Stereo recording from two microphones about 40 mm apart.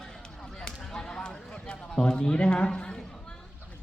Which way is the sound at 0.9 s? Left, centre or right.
Centre.